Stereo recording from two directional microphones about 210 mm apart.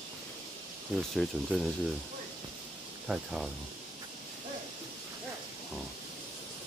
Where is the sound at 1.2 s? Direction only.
Centre (ahead or behind).